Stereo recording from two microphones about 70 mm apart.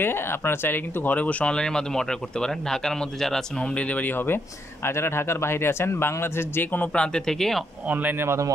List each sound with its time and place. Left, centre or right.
0.0 s speech: left
6.9 s speech: centre
7.8 s speech: right